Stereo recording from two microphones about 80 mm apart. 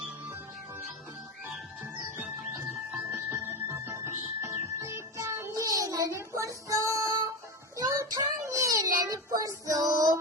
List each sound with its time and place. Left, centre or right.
3.2 s music: right
5.6 s child singing: right